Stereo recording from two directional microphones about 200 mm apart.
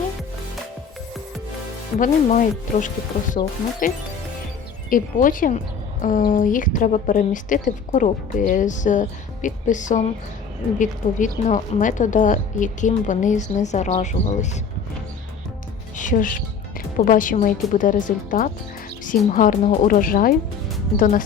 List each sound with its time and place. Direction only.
2.0 s a woman's voice: 40° left (ahead or behind)
16.0 s a woman's voice: 40° left (ahead or behind)